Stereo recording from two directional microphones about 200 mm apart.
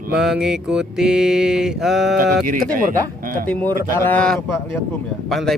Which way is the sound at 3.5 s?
10° left (ahead or behind).